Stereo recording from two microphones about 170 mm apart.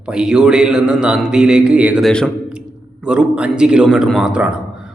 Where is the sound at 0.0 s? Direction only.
5° right (ahead or behind).